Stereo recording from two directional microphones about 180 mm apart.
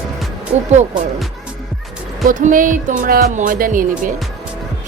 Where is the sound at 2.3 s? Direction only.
45° right (ahead or behind).